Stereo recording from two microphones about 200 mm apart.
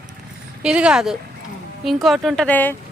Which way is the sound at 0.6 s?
5° right (ahead or behind).